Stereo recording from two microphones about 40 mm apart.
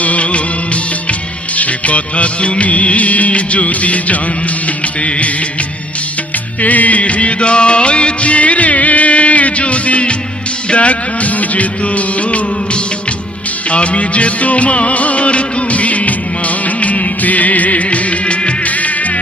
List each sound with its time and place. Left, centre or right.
0.0 s music of bollywood: left
6.6 s music: left
10.7 s music of bollywood: left
13.7 s music: left